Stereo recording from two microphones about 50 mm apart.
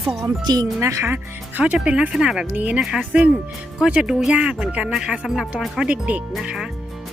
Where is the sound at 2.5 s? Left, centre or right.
Right.